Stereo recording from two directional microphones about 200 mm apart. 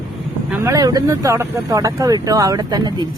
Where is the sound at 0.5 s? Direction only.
15° right (ahead or behind).